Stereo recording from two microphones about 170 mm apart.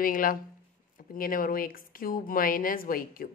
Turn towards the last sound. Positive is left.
turn(degrees=55)  # may be behind; listen again after turning